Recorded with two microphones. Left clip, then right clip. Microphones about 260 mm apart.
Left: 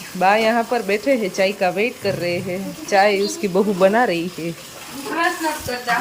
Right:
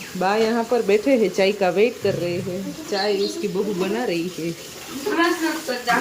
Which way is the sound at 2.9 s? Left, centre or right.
Centre.